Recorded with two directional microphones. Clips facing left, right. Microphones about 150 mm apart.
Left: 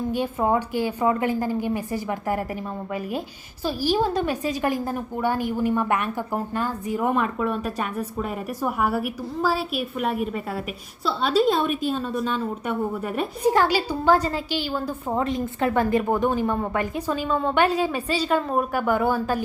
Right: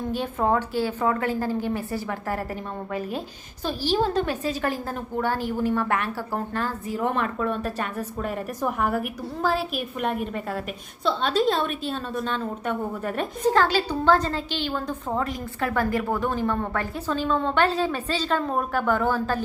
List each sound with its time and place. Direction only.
0.1 s a woman's voice: 10° left (ahead or behind)
3.6 s a woman's voice: 10° left (ahead or behind)
15.2 s a woman's voice: 20° left (ahead or behind)